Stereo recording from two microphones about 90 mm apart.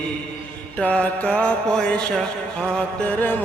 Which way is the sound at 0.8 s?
15° left (ahead or behind).